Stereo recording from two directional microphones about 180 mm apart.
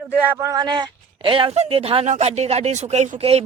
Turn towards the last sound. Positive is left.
turn(degrees=-35)  # may be behind; listen again after turning